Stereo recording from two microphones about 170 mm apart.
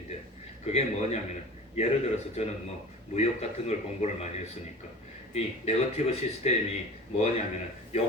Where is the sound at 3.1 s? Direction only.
40° left (ahead or behind).